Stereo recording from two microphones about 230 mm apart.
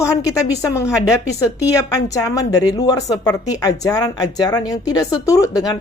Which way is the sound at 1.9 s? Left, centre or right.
Centre.